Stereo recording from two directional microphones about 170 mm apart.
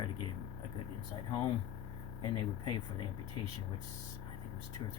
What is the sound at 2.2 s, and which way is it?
Speech, 25° left (ahead or behind).